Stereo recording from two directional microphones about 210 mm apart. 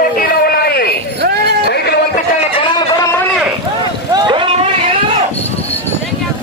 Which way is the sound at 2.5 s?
20° left (ahead or behind).